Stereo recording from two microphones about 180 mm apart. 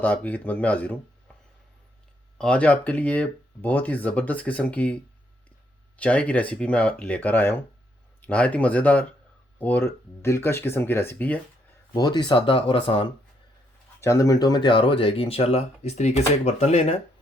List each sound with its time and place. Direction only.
0.0 s speech: 10° left (ahead or behind)
2.4 s speech: 5° left (ahead or behind)
6.0 s speech: 10° left (ahead or behind)
11.9 s speech: 25° left (ahead or behind)
14.0 s speech: 15° left (ahead or behind); by 17.0 s 35° left (ahead or behind)